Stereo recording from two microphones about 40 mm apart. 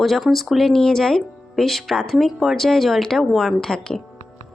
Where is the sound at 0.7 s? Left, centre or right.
Centre.